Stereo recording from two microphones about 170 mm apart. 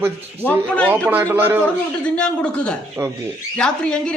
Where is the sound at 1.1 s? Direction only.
10° right (ahead or behind).